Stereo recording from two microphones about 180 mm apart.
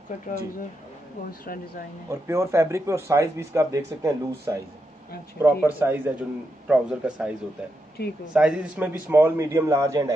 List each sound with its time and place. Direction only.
1.5 s speech: 55° left (ahead or behind)
2.0 s speech: 15° right (ahead or behind)